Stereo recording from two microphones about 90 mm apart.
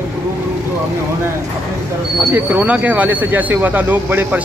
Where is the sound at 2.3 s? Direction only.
20° right (ahead or behind).